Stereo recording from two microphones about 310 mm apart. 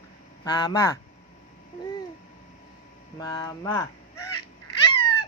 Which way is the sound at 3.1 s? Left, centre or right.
Centre.